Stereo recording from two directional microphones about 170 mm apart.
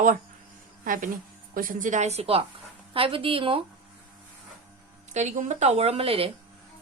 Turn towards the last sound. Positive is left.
turn(degrees=-35)  # may be behind; listen again after turning